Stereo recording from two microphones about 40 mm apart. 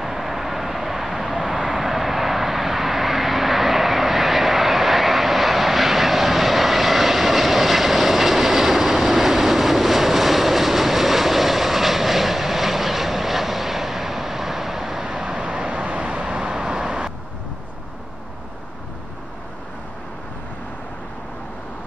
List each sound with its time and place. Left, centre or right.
0.0 s vehicle: centre
15.0 s vehicle: right